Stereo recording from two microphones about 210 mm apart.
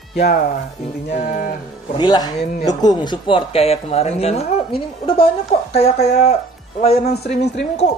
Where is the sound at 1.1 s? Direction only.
35° left (ahead or behind).